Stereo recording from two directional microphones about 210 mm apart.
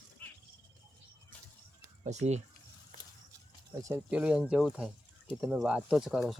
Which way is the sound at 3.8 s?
10° right (ahead or behind).